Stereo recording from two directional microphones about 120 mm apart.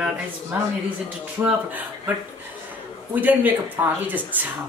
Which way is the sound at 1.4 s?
15° right (ahead or behind).